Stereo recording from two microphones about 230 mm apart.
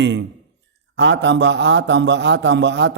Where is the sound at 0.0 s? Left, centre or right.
Right.